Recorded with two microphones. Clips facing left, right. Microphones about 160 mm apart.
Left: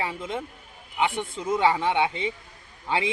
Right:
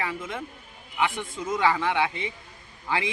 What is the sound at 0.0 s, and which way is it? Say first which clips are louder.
A man's voice: left 2 dB; 25° left (ahead or behind).